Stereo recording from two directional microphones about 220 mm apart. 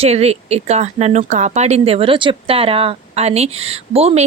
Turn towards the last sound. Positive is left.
turn(degrees=-30)  # may be behind; listen again after turning